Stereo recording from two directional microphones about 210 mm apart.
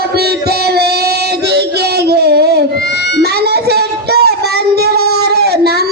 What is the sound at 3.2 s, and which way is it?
Music, 50° right (ahead or behind).